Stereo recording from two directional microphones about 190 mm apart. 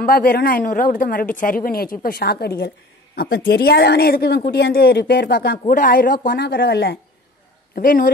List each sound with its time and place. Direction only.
0.0 s speech: 50° left (ahead or behind)
7.7 s speech: 45° left (ahead or behind)